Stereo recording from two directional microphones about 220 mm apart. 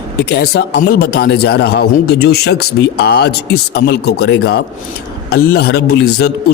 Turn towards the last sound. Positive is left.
turn(degrees=45)  # may be behind; listen again after turning